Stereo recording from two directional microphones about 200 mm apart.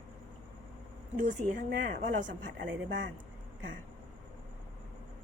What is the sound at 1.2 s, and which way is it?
Speech, 40° right (ahead or behind).